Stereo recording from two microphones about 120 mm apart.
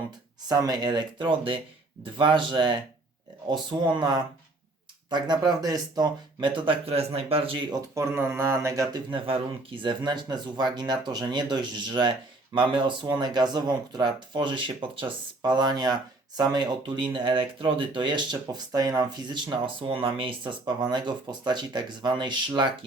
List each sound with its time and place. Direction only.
0.4 s speech: 30° right (ahead or behind); by 7.6 s 50° right (ahead or behind)
7.9 s speech: 20° right (ahead or behind); by 22.7 s 40° right (ahead or behind)